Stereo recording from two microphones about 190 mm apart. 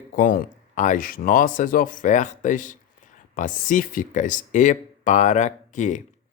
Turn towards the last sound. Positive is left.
turn(degrees=40)  # may be behind; listen again after turning